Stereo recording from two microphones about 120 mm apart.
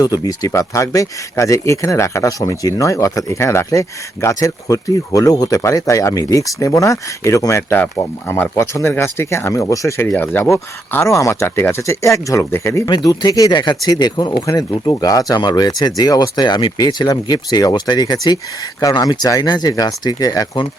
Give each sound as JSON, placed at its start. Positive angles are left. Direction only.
{"t": 0.0, "sound": "speech", "side_deg": 30}